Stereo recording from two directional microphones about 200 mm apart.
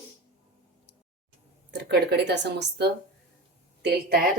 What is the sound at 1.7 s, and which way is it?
A woman's voice, 55° right (ahead or behind).